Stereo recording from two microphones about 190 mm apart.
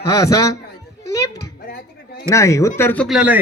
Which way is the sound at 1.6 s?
60° left (ahead or behind).